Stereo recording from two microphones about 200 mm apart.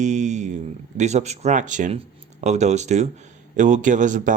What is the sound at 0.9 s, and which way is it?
A man's voice, 35° right (ahead or behind).